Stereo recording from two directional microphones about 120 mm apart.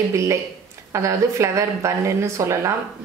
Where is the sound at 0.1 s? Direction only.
25° right (ahead or behind).